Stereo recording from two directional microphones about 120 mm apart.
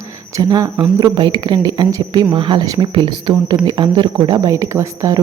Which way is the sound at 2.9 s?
45° right (ahead or behind).